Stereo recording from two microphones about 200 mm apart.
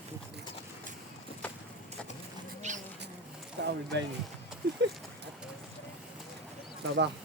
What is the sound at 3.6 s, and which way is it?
Speech, 60° right (ahead or behind).